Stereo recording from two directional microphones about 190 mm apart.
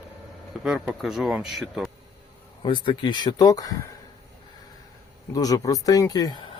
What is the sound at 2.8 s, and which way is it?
Speech, 25° left (ahead or behind).